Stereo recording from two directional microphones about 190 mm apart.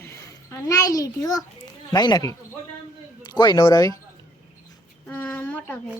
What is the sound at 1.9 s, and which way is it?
A man's voice, 20° left (ahead or behind).